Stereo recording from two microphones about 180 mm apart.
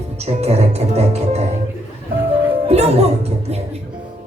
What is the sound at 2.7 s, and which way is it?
Speech, 35° right (ahead or behind).